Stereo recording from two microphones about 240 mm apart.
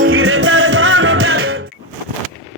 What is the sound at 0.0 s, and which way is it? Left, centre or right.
Music, right.